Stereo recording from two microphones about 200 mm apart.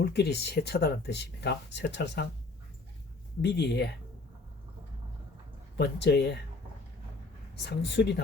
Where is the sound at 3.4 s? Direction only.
60° left (ahead or behind).